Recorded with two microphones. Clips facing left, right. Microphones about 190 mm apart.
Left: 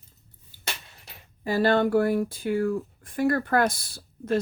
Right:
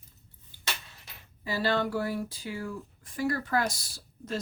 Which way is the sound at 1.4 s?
50° left (ahead or behind).